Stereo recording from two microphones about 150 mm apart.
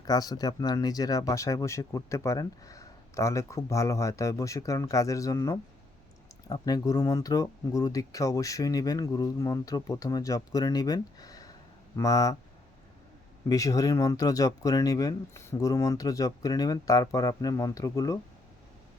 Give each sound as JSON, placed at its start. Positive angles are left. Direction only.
{"t": 0.0, "sound": "speech", "side_deg": 25}
{"t": 13.5, "sound": "speech", "side_deg": 25}